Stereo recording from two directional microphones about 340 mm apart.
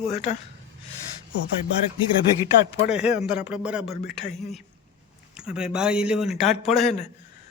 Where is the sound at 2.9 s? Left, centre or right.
Centre.